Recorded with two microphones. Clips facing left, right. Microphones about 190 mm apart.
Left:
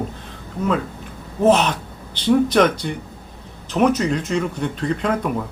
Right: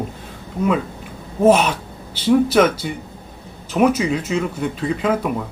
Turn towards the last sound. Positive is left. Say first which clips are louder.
# right 1 dB
turn(degrees=-5)  # may be behind; listen again after turning